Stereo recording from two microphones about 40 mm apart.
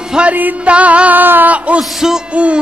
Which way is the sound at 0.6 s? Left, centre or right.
Right.